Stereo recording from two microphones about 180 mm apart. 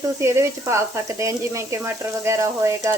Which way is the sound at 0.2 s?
15° right (ahead or behind).